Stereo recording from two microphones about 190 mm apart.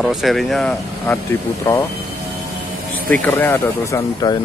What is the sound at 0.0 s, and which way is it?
Speech, centre (ahead or behind).